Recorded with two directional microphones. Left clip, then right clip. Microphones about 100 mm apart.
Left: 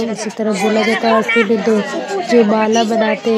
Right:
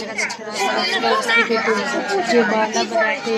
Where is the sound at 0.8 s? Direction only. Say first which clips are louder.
Left 5 dB; 30° right (ahead or behind).